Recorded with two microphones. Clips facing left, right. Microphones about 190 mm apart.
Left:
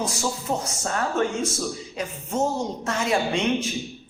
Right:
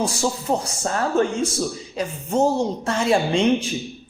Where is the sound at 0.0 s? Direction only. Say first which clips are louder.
Right 4 dB; 30° right (ahead or behind).